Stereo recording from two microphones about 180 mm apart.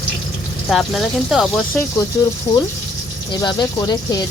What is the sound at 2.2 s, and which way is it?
Speech, 20° left (ahead or behind).